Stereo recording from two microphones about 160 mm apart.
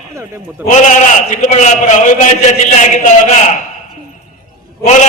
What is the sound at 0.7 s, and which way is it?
A man's voice, 50° left (ahead or behind).